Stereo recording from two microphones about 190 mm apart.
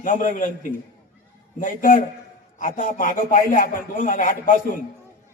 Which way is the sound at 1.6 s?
45° left (ahead or behind).